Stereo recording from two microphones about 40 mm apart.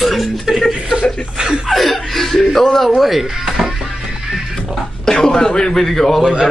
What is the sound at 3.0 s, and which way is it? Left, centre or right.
Speech, centre.